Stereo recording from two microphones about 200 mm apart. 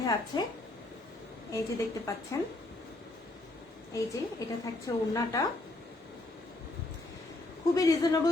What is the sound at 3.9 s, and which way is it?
A woman's voice, 15° left (ahead or behind).